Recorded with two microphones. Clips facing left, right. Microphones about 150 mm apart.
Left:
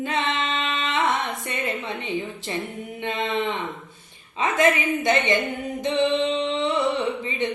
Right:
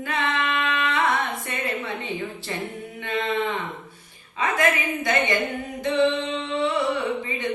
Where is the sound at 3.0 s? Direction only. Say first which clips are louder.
Even; 20° left (ahead or behind).